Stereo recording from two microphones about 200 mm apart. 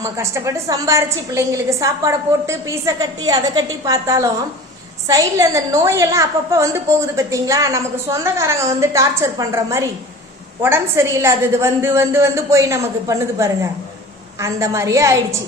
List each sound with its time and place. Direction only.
0.0 s a woman's voice: 15° right (ahead or behind)